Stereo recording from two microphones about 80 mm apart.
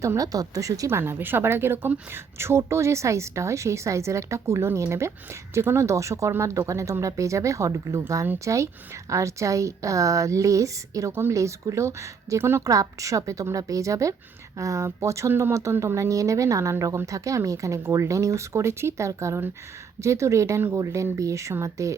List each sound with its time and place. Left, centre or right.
0.0 s speech: right
11.1 s speech: right
11.3 s speech: right
12.6 s speech: right
15.3 s speech: right
15.8 s speech: right
20.6 s speech: right
20.8 s speech: right